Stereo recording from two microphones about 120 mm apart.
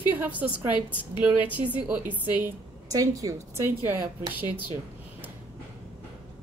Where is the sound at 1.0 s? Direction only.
15° right (ahead or behind).